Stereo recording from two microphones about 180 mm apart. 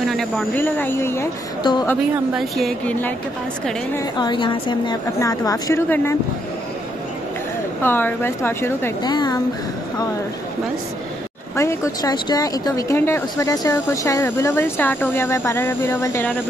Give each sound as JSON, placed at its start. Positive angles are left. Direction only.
{"t": 0.0, "sound": "speech", "side_deg": 0}
{"t": 0.6, "sound": "speech", "side_deg": 10}
{"t": 1.6, "sound": "a woman's voice", "side_deg": 25}
{"t": 2.3, "sound": "speech", "side_deg": 0}
{"t": 4.2, "sound": "a woman's voice", "side_deg": 25}
{"t": 7.8, "sound": "speech", "side_deg": 10}
{"t": 11.5, "sound": "speech", "side_deg": 15}